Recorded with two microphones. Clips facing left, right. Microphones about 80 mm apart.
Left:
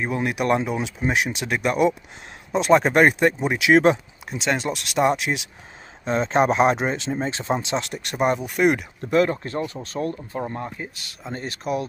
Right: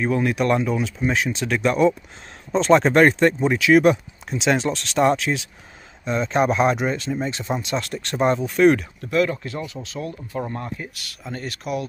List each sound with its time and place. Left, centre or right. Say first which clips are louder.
0.0 s speech: right 3 dB; centre
4.3 s speech: right 3 dB; centre
6.0 s speech: left 1 dB; left; by 8.8 s centre
9.0 s speech: left 4 dB; left
10.4 s speech: left 1 dB; centre